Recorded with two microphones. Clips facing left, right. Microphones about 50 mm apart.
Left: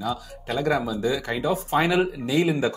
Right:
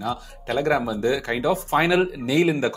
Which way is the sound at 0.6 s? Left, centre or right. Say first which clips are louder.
Right 2 dB; right.